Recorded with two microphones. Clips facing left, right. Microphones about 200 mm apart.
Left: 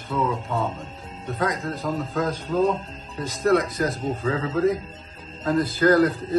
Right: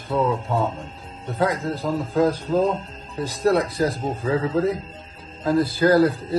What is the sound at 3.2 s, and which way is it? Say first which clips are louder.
Speech: right 1 dB; 30° right (ahead or behind).